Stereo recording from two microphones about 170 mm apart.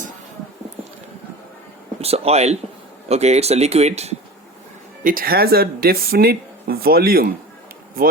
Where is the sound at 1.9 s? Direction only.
35° right (ahead or behind).